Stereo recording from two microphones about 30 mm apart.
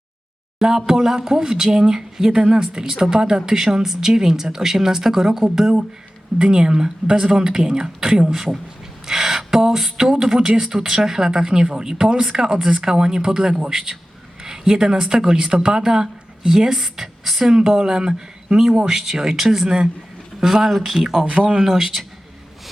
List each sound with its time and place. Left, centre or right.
0.9 s speech: centre
6.4 s speech: right
18.8 s speech: centre
19.6 s speech: right
20.4 s speech: centre
20.7 s speech: centre
21.2 s speech: right